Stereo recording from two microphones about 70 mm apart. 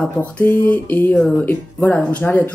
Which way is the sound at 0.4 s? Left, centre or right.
Left.